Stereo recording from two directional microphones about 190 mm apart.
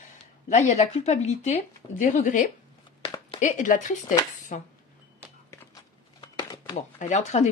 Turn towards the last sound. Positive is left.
turn(degrees=35)  # may be behind; listen again after turning